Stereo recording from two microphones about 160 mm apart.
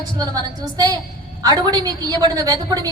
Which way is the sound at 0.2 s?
25° right (ahead or behind).